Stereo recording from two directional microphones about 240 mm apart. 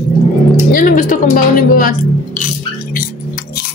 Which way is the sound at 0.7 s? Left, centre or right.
Left.